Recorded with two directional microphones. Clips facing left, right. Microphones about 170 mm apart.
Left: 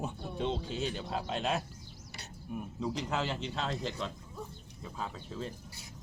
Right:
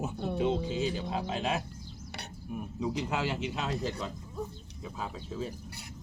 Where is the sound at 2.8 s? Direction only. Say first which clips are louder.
Right 2 dB; 5° right (ahead or behind).